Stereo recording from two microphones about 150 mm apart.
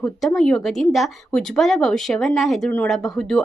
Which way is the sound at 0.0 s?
5° left (ahead or behind).